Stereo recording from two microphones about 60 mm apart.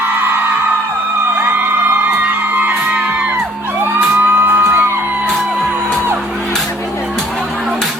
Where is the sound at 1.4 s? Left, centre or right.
Right.